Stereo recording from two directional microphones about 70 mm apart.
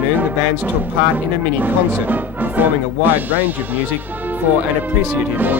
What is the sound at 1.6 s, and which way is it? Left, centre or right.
Speech, right.